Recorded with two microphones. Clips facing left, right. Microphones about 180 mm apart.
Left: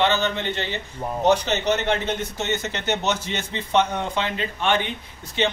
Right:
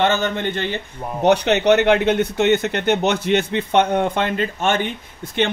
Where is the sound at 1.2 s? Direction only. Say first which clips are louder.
Right 5 dB; 65° right (ahead or behind).